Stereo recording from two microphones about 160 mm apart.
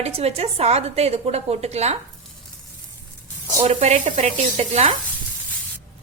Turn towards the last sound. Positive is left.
turn(degrees=-40)  # may be behind; listen again after turning